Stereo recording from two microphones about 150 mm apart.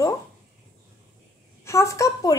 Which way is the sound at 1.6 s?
20° left (ahead or behind).